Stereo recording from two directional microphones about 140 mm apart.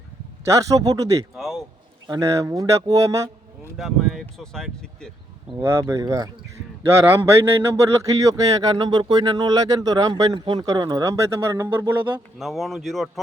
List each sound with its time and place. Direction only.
0.5 s speech: 25° right (ahead or behind)
1.4 s speech: centre (ahead or behind)
2.0 s speech: 25° right (ahead or behind)
3.8 s speech: centre (ahead or behind)
5.5 s speech: 20° right (ahead or behind)
7.4 s speech: 20° right (ahead or behind)
12.4 s speech: centre (ahead or behind)